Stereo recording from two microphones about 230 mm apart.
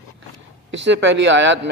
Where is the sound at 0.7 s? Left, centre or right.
Right.